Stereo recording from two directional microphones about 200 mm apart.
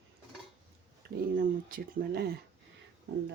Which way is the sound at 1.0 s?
45° right (ahead or behind).